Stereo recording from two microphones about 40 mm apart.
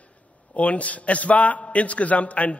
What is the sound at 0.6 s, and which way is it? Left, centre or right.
A man's voice, left.